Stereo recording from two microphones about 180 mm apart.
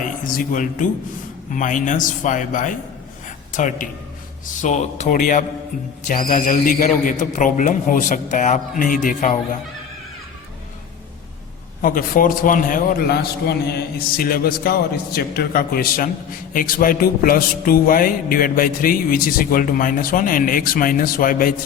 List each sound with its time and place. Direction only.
0.3 s a man's voice: 45° left (ahead or behind)
11.8 s a man's voice: 50° left (ahead or behind)